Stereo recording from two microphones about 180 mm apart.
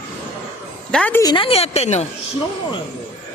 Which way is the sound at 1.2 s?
25° left (ahead or behind).